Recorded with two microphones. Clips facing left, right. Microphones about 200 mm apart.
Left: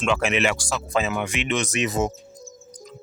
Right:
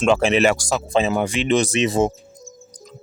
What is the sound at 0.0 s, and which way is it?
Speech, 35° right (ahead or behind).